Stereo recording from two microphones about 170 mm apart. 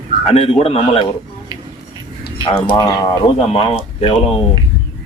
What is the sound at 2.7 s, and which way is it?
Speech, 25° left (ahead or behind).